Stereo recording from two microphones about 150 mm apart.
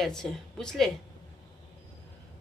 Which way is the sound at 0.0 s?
5° left (ahead or behind).